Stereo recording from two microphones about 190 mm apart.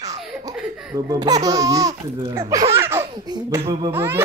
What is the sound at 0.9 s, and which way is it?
Speech, 20° right (ahead or behind).